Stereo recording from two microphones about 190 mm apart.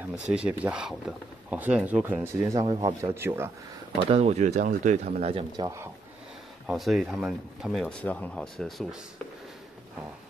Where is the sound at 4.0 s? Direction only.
30° right (ahead or behind).